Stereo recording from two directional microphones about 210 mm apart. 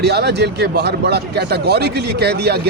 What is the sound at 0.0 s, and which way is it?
Speech, 50° right (ahead or behind).